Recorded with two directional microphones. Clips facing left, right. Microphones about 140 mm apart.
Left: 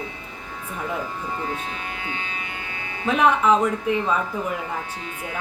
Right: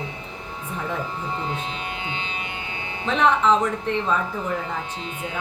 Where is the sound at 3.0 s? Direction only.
10° left (ahead or behind).